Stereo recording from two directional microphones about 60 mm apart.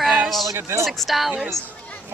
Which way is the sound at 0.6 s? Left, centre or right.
Right.